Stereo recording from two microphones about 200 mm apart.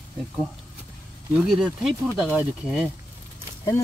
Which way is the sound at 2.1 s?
5° right (ahead or behind).